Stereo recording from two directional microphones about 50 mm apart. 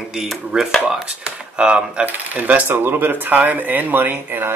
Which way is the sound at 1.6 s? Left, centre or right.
Centre.